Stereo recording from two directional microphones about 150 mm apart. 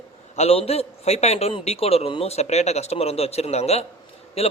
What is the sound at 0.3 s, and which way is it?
A man's voice, 40° left (ahead or behind).